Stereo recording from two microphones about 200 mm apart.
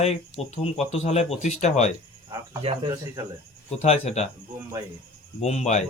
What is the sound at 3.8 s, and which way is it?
Speech, 30° left (ahead or behind).